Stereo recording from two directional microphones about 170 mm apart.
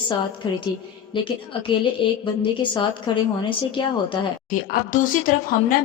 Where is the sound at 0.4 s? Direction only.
30° left (ahead or behind).